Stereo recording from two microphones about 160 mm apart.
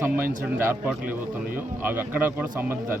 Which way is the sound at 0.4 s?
15° right (ahead or behind).